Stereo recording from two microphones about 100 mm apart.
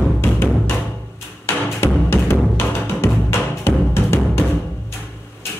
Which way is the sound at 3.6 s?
25° left (ahead or behind).